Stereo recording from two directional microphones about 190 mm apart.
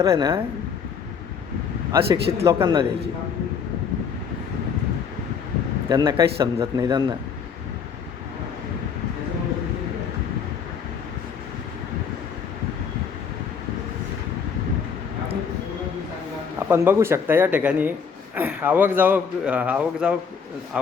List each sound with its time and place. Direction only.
0.0 s speech: 20° right (ahead or behind)
1.9 s speech: 15° right (ahead or behind)
5.9 s a man's voice: 20° right (ahead or behind)
16.6 s speech: 10° right (ahead or behind)